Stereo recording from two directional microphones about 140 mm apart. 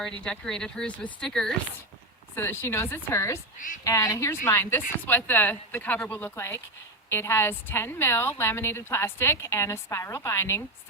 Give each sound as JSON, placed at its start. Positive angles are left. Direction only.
{"t": 0.2, "sound": "speech", "side_deg": 5}
{"t": 2.3, "sound": "a woman's voice", "side_deg": 15}